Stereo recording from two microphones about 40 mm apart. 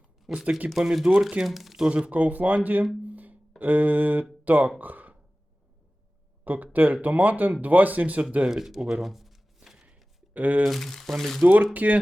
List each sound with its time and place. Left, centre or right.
0.3 s speech: centre
1.5 s speech: centre
1.8 s speech: right
2.0 s speech: right
3.0 s a sound: right
3.6 s speech: right
4.8 s a sound: right
6.4 s a sound: right
6.7 s speech: right
8.4 s speech: centre
10.3 s speech: right
10.7 s speech: centre
11.4 s speech: right